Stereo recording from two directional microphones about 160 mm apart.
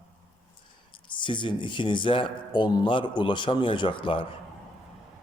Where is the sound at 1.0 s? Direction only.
30° left (ahead or behind).